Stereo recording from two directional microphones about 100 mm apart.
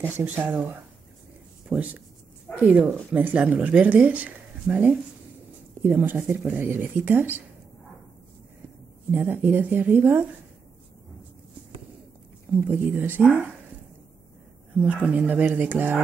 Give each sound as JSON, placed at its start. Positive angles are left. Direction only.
{"t": 0.2, "sound": "speech", "side_deg": -15}
{"t": 1.7, "sound": "speech", "side_deg": -15}
{"t": 9.1, "sound": "speech", "side_deg": -20}
{"t": 12.5, "sound": "speech", "side_deg": -20}
{"t": 14.8, "sound": "speech", "side_deg": -15}